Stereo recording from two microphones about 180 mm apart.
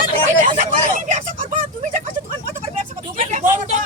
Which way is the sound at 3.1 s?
40° right (ahead or behind).